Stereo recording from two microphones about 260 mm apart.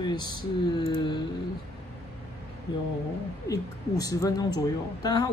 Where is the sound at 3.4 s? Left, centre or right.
Centre.